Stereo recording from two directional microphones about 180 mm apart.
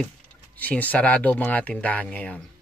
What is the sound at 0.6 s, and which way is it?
Speech, 10° left (ahead or behind).